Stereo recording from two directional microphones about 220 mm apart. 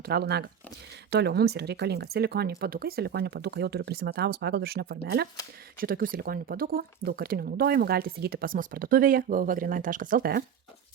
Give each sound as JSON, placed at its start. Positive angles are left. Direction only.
{"t": 0.0, "sound": "speech", "side_deg": -45}